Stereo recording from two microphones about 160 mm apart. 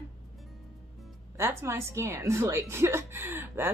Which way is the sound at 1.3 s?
15° right (ahead or behind).